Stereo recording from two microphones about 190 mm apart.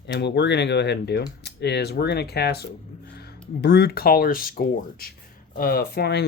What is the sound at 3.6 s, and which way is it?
Speech, 60° left (ahead or behind).